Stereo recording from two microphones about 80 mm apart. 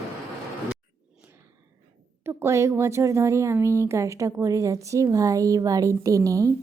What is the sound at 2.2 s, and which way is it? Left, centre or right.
Speech, right.